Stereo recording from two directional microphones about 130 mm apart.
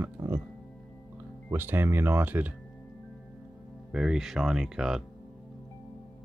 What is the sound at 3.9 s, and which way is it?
Speech, 5° right (ahead or behind).